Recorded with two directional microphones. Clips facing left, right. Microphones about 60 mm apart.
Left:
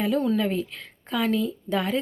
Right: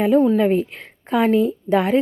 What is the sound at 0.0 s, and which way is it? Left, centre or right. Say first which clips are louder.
A woman's voice: right 8 dB; right.